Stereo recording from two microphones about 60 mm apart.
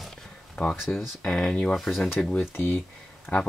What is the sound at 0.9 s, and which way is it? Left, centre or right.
Speech, centre.